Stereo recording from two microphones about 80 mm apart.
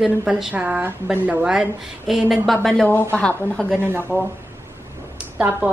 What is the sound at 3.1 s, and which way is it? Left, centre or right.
Speech, centre.